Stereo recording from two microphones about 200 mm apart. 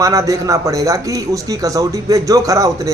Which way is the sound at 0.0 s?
15° right (ahead or behind).